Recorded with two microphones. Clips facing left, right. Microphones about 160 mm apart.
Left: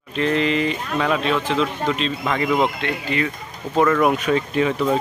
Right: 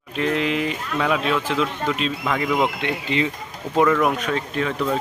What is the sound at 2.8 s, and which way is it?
Speech, 20° right (ahead or behind).